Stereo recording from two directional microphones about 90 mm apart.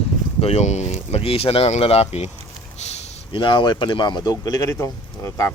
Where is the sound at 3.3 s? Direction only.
65° left (ahead or behind).